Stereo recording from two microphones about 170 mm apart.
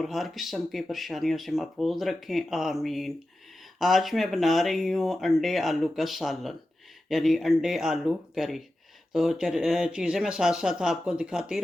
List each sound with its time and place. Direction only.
0.0 s speech: centre (ahead or behind)